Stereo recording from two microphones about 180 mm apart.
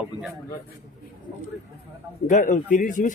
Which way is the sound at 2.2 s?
45° left (ahead or behind).